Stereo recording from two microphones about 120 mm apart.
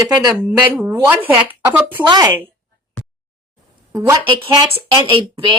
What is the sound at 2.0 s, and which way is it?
Speech, 35° right (ahead or behind).